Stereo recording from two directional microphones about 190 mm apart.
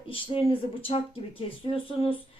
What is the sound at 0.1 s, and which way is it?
Speech, 30° left (ahead or behind).